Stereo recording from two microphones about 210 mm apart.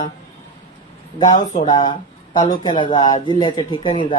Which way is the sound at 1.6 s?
20° left (ahead or behind).